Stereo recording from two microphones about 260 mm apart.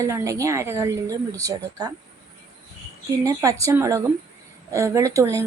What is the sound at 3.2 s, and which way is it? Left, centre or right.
A woman's voice, centre.